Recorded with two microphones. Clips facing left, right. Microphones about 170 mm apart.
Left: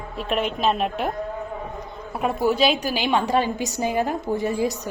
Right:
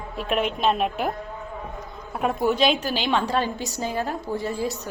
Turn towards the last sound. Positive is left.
turn(degrees=15)  # may be behind; listen again after turning